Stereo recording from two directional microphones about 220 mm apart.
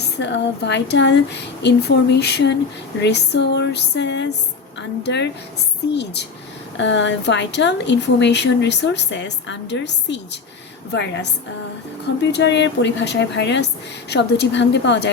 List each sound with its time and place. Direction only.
0.2 s speech: 55° left (ahead or behind)
12.3 s speech: 50° left (ahead or behind)